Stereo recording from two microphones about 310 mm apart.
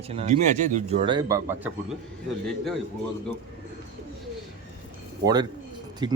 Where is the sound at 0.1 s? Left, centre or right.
Right.